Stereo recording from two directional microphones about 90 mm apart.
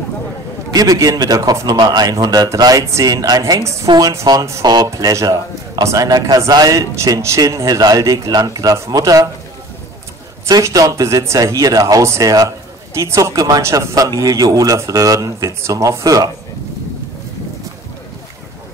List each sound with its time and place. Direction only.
0.7 s a man's voice: 40° right (ahead or behind)
7.0 s speech: 35° right (ahead or behind)
10.5 s speech: 40° right (ahead or behind)